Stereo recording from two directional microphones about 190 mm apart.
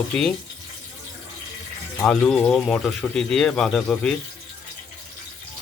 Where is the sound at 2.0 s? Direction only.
5° left (ahead or behind).